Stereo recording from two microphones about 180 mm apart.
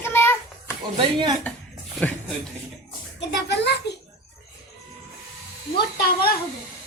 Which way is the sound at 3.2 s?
70° left (ahead or behind).